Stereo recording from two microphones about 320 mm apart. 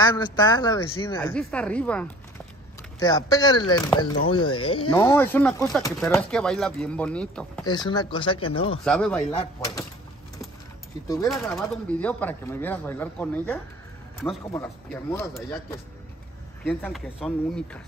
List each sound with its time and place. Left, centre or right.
0.0 s speech: centre
4.4 s speech: left
4.7 s speech: centre
8.8 s speech: centre
9.2 s speech: centre
11.1 s speech: centre